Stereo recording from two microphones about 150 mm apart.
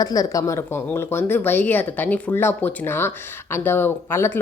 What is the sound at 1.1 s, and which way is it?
Speech, 15° left (ahead or behind).